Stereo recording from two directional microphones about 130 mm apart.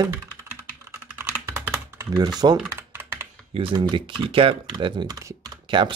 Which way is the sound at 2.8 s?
15° right (ahead or behind).